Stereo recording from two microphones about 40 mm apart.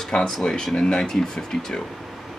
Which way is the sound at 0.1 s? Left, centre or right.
Centre.